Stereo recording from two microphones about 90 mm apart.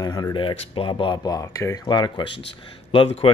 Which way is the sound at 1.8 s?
55° left (ahead or behind).